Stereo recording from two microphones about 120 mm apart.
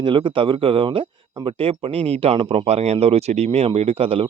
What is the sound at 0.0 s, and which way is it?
A man's voice, 45° right (ahead or behind).